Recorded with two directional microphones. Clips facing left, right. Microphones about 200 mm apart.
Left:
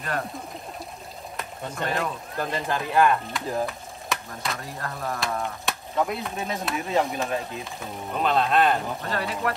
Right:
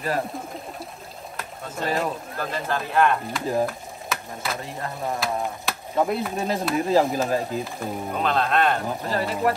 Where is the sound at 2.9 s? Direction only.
Centre (ahead or behind).